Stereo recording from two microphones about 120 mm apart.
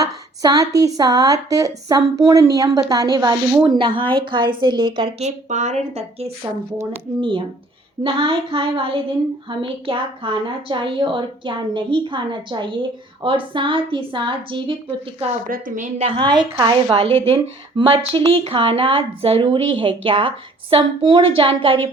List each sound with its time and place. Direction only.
0.0 s a woman's voice: 30° right (ahead or behind)
3.6 s a woman's voice: 45° right (ahead or behind)
5.2 s speech: 90° right; by 6.3 s 60° right (ahead or behind)
7.2 s a woman's voice: 45° right (ahead or behind)
15.7 s a woman's voice: 90° right
16.0 s a woman's voice: 45° right (ahead or behind)